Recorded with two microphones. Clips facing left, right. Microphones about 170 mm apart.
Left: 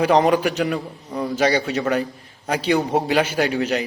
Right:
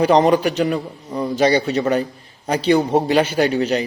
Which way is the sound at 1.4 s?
30° right (ahead or behind).